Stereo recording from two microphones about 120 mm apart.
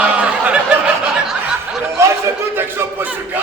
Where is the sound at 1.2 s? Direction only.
5° right (ahead or behind).